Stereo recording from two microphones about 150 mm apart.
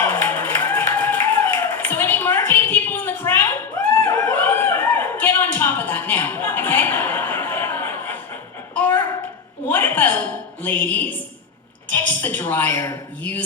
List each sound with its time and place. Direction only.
0.0 s music: 15° left (ahead or behind)
4.0 s a sound: 15° left (ahead or behind)
11.9 s a woman's voice: 10° left (ahead or behind)